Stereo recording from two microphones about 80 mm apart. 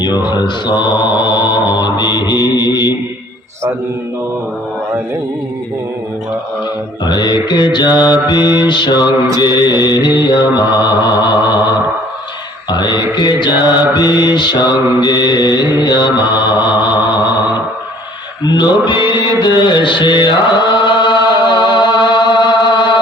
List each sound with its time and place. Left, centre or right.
0.0 s mantra: left
7.0 s mantra: left
12.7 s mantra: left
18.4 s music: left
19.4 s chant: left